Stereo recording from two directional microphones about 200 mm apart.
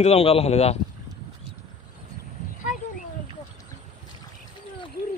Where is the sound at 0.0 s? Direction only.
30° left (ahead or behind).